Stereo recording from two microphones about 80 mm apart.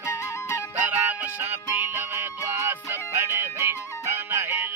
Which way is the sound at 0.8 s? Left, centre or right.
Right.